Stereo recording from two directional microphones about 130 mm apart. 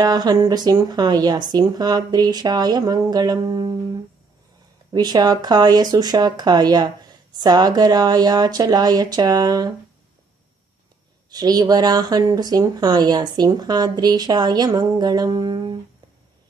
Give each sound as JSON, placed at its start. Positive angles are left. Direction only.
{"t": 0.0, "sound": "speech", "side_deg": -30}
{"t": 4.9, "sound": "speech", "side_deg": -30}
{"t": 11.2, "sound": "speech", "side_deg": -30}